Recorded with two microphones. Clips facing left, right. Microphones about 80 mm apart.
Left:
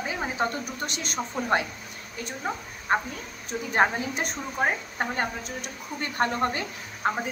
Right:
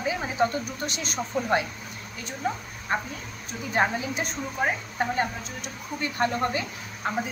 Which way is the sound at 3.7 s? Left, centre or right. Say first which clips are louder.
Left 1 dB; left.